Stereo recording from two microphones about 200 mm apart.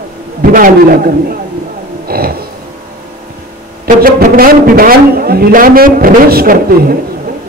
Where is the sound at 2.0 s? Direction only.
50° right (ahead or behind).